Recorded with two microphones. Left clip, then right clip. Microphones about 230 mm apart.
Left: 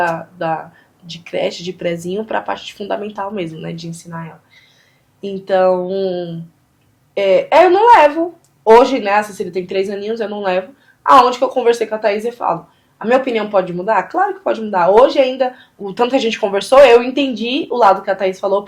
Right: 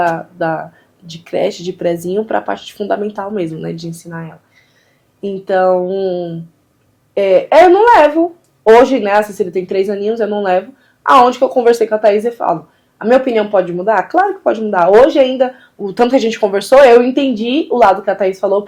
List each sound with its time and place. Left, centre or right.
0.0 s speech: right